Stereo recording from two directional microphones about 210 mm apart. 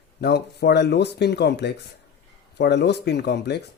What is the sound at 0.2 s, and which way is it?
Speech, 50° left (ahead or behind).